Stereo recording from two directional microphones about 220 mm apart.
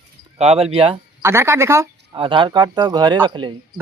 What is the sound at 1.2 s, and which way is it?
Speech, 10° right (ahead or behind).